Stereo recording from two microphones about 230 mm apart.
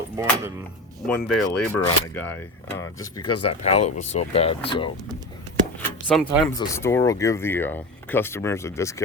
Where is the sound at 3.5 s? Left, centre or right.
Left.